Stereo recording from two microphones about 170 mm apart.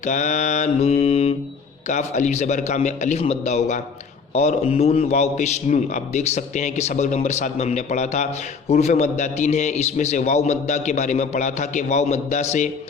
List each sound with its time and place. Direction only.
0.0 s a man's voice: 45° left (ahead or behind)